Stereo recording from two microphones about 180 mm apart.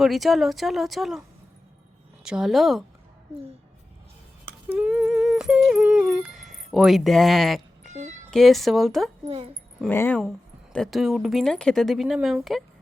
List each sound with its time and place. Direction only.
0.0 s speech: centre (ahead or behind)
2.2 s speech: 5° right (ahead or behind)
4.7 s humming: 5° right (ahead or behind)
7.9 s a sound: 40° right (ahead or behind)
8.3 s speech: centre (ahead or behind)
9.2 s a child's voice: 30° right (ahead or behind)
9.9 s speech: 10° left (ahead or behind)